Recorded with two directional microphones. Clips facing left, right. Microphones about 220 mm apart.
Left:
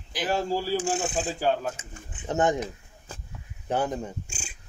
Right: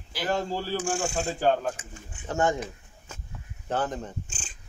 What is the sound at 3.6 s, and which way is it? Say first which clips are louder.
Speech: left 2 dB; 10° left (ahead or behind).